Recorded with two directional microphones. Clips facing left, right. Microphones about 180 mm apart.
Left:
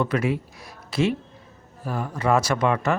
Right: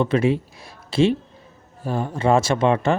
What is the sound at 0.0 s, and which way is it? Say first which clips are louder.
Speech: right 4 dB; 25° right (ahead or behind).